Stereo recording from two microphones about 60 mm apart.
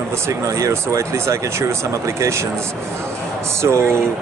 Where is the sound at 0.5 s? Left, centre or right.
Right.